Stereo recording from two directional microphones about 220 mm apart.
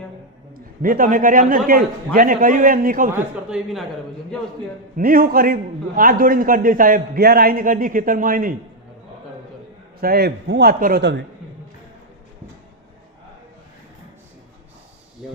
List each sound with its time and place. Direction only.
0.5 s a man's voice: 40° right (ahead or behind)
3.1 s speech: centre (ahead or behind)
4.9 s a man's voice: 40° right (ahead or behind)
10.0 s a man's voice: 45° right (ahead or behind)